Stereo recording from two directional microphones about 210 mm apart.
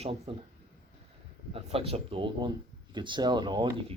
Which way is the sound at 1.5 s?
25° right (ahead or behind).